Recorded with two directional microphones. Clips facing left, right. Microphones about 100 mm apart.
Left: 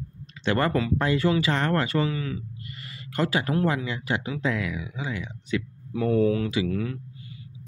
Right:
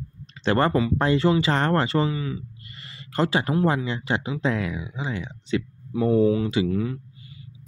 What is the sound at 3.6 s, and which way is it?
Speech, 30° right (ahead or behind).